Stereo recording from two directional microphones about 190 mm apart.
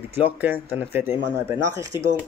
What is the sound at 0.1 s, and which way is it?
Speech, 10° right (ahead or behind).